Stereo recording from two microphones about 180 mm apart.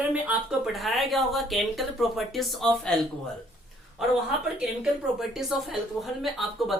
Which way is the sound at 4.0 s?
5° right (ahead or behind).